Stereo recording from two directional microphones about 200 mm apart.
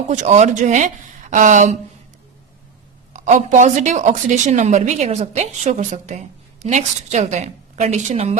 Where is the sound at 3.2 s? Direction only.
35° right (ahead or behind).